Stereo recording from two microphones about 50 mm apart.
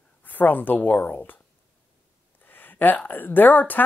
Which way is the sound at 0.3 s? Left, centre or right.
Left.